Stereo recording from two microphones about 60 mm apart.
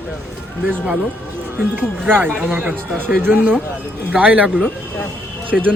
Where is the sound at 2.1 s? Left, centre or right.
Right.